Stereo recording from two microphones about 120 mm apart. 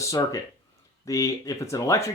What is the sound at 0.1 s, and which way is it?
Speech, 30° left (ahead or behind).